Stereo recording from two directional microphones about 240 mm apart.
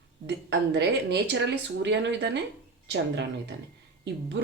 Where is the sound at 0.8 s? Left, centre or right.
Right.